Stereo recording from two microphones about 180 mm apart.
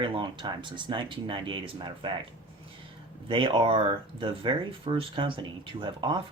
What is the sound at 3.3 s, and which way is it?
Speech, 30° right (ahead or behind).